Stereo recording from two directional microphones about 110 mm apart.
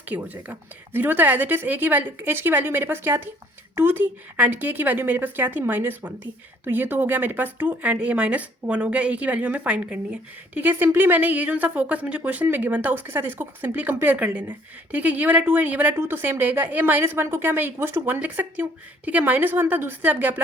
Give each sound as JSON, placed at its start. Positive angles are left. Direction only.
{"t": 0.0, "sound": "a woman's voice", "side_deg": -15}